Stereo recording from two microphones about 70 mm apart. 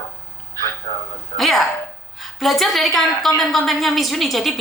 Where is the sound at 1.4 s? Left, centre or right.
Centre.